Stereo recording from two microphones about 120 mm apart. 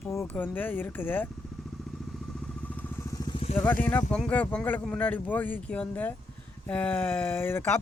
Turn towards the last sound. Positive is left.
turn(degrees=15)  # may be behind; listen again after turning